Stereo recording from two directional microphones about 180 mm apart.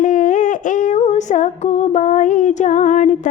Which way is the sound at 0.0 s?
45° left (ahead or behind).